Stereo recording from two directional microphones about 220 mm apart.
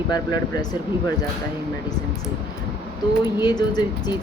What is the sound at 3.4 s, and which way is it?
Speech, 20° left (ahead or behind).